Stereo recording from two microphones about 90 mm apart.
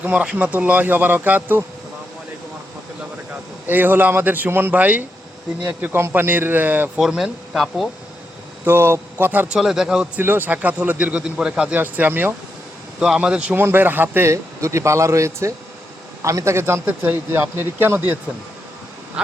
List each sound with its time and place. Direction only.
0.0 s speech: 15° right (ahead or behind)
3.7 s speech: 20° right (ahead or behind)
7.0 s speech: 5° right (ahead or behind)
8.6 s speech: 25° right (ahead or behind)
9.5 s speech: 5° right (ahead or behind)
10.2 s speech: 20° right (ahead or behind)
11.8 s speech: 20° right (ahead or behind)
13.0 s speech: 10° right (ahead or behind)
13.6 s a man's voice: 25° right (ahead or behind)
19.2 s insect: 10° right (ahead or behind)